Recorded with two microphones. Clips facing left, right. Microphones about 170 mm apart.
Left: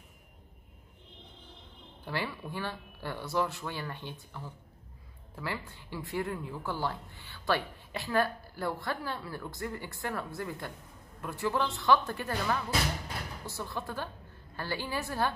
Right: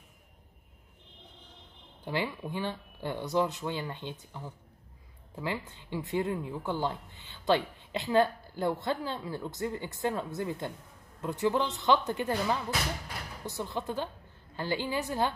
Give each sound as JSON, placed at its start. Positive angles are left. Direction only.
{"t": 2.0, "sound": "speech", "side_deg": -15}